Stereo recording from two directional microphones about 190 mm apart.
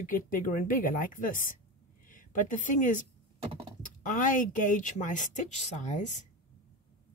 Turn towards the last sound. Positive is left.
turn(degrees=40)  # may be behind; listen again after turning